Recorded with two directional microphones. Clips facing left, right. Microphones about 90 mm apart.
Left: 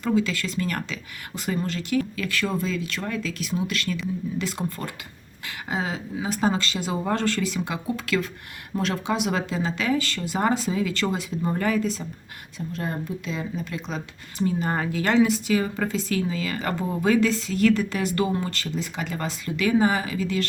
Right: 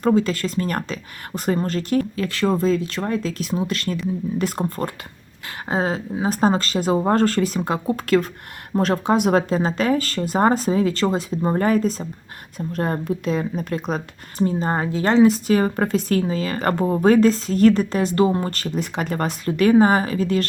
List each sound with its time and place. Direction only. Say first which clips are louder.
0.0 s speech: right 5 dB; 40° right (ahead or behind)
12.5 s speech: right 6 dB; 50° right (ahead or behind)
14.4 s speech: right 4 dB; 30° right (ahead or behind)